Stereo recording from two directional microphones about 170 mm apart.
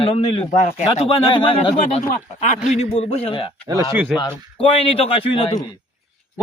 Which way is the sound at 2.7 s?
40° left (ahead or behind).